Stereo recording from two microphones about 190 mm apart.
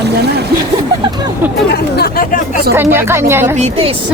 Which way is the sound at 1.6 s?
55° left (ahead or behind).